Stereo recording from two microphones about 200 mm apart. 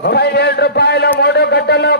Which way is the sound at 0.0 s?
55° left (ahead or behind).